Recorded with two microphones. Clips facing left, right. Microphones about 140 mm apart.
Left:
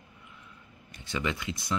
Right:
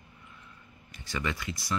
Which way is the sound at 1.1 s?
20° left (ahead or behind).